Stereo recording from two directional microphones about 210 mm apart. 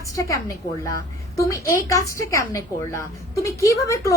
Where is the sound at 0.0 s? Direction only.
15° left (ahead or behind).